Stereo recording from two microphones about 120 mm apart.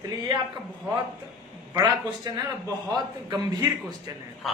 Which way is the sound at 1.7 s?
30° right (ahead or behind).